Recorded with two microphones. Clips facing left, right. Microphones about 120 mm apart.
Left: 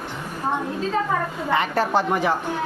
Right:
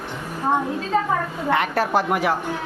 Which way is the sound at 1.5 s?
Centre (ahead or behind).